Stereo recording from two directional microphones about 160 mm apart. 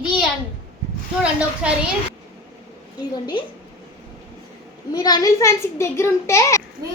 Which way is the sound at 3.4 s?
30° left (ahead or behind).